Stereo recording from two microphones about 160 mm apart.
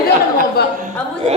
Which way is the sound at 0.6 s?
85° left.